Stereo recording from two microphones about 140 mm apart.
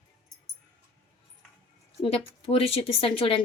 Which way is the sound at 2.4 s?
45° left (ahead or behind).